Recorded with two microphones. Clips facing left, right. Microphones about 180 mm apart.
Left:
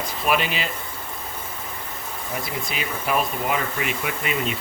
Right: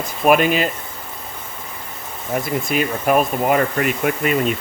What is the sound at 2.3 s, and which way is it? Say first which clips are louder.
Speech: right 10 dB; 50° right (ahead or behind).